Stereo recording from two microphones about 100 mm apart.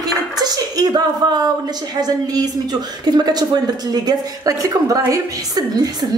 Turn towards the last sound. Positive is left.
turn(degrees=-40)  # may be behind; listen again after turning